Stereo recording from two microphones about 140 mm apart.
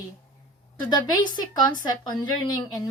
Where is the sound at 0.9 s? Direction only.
30° left (ahead or behind).